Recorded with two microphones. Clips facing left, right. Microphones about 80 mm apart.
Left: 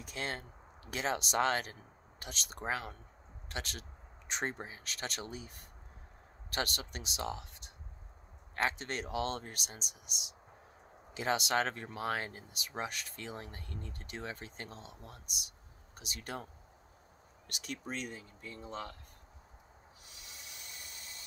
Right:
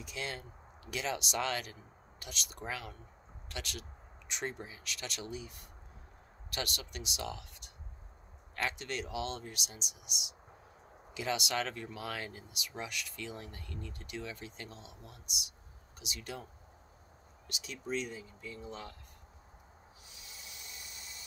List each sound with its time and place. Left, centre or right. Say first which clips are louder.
0.0 s speech: left 1 dB; left
17.5 s speech: right 3 dB; left
20.1 s hiss: left 1 dB; left